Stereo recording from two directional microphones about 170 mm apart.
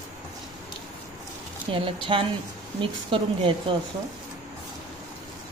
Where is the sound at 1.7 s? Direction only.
30° right (ahead or behind).